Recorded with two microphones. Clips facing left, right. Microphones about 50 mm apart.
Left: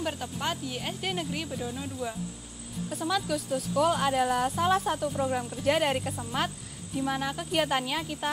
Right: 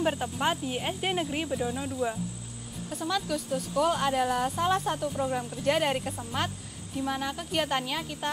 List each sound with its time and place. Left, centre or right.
0.0 s speech: centre
2.9 s a woman's voice: centre